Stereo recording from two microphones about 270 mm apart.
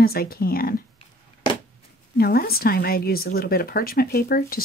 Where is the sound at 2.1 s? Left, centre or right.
Left.